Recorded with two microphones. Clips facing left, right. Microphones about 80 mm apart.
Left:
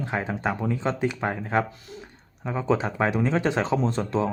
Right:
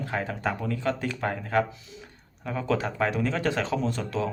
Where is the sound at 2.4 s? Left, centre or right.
Left.